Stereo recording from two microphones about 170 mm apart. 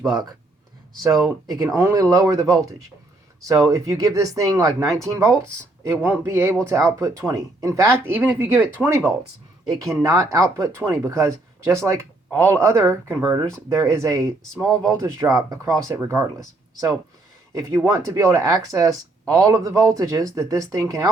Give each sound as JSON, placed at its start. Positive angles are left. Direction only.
{"t": 0.1, "sound": "speech", "side_deg": -25}